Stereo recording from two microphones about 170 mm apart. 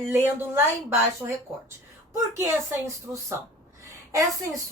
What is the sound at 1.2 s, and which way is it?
Speech, 15° right (ahead or behind).